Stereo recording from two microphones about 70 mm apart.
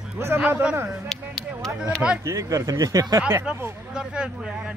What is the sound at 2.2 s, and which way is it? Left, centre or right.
Speech, right.